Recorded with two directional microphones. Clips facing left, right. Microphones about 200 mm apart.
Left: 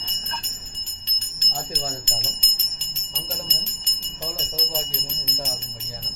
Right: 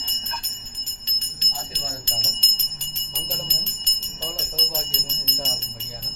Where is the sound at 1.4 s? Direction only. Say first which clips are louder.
Left 5 dB; 50° left (ahead or behind).